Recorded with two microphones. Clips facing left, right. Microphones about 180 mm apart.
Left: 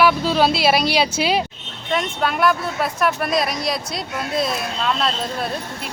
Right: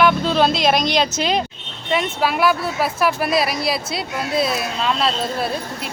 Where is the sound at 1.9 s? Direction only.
5° right (ahead or behind).